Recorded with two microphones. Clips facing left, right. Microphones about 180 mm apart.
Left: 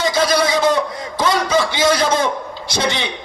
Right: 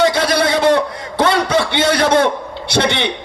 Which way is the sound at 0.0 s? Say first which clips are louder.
Right 2 dB; 60° right (ahead or behind).